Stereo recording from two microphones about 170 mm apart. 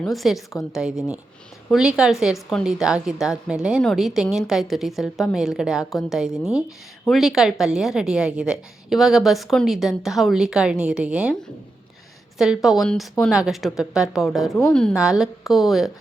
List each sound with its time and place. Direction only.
0.0 s a woman's voice: centre (ahead or behind)
12.4 s a woman's voice: centre (ahead or behind)